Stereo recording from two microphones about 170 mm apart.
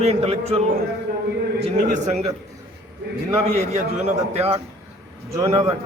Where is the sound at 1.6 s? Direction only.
45° right (ahead or behind).